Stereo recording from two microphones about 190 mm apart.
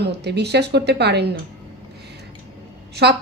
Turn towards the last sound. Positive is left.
turn(degrees=-60)  # may be behind; listen again after turning